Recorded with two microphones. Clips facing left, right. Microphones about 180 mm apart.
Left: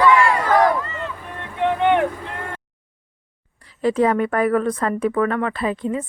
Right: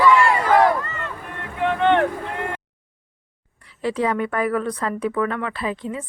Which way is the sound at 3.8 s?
45° left (ahead or behind).